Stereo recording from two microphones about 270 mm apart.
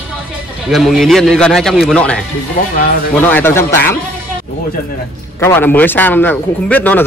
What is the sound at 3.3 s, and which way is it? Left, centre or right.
Speech, centre.